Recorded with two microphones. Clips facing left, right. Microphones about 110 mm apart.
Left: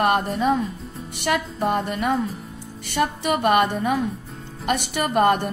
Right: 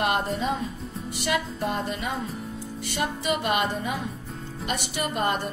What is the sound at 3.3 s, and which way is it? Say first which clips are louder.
Music: left 6 dB; 50° left (ahead or behind).